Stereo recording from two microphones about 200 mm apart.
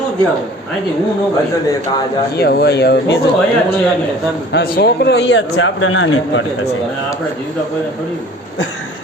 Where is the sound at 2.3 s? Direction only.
50° left (ahead or behind).